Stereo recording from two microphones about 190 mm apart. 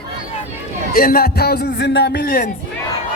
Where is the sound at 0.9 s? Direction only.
50° left (ahead or behind).